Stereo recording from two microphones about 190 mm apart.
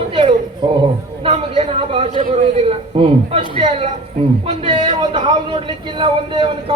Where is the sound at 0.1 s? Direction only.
25° right (ahead or behind).